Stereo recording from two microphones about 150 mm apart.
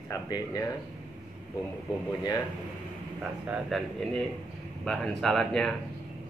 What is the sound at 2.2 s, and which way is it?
Speech, 25° left (ahead or behind).